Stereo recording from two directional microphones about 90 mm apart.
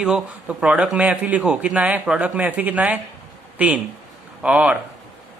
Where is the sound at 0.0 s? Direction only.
5° right (ahead or behind).